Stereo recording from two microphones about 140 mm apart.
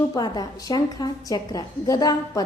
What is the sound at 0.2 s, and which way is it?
A woman's voice, 30° left (ahead or behind).